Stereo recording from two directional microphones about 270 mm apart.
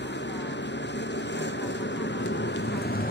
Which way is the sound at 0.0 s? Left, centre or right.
Left.